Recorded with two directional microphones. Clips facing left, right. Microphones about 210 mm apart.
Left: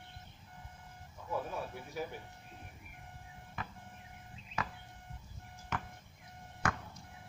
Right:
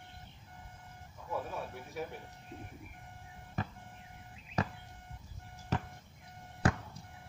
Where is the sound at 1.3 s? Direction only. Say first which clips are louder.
Even; centre (ahead or behind).